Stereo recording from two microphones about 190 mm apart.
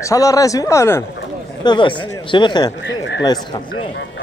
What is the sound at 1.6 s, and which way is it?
Speech, 25° left (ahead or behind).